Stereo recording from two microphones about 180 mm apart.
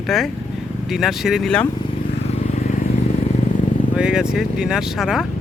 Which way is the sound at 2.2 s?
40° left (ahead or behind).